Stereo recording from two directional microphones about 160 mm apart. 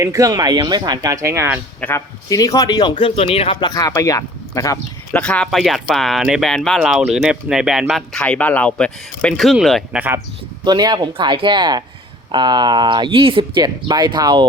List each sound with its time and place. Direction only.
0.0 s speech: 20° right (ahead or behind)
1.8 s speech: 15° left (ahead or behind)
3.0 s speech: 40° left (ahead or behind); by 4.8 s 20° left (ahead or behind)
5.1 s speech: 5° left (ahead or behind)
10.6 s speech: 25° right (ahead or behind)